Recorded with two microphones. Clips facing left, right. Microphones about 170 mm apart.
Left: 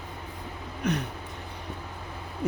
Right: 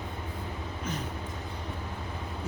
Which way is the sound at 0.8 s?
70° left (ahead or behind).